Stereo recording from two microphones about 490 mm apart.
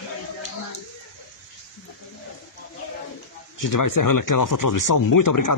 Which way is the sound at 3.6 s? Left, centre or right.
Left.